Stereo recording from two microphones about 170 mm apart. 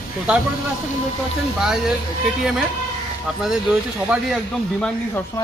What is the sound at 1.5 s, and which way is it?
Speech, 5° right (ahead or behind).